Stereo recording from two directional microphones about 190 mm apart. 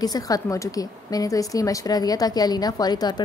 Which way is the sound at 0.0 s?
20° left (ahead or behind).